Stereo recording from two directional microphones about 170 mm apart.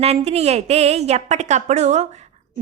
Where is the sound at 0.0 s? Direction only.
40° right (ahead or behind).